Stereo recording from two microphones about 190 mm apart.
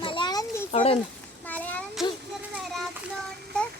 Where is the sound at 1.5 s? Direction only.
10° left (ahead or behind).